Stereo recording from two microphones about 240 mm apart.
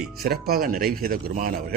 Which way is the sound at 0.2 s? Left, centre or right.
Right.